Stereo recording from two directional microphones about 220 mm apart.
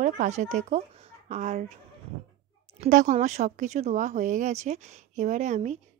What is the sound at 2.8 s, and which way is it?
A woman's voice, 35° right (ahead or behind).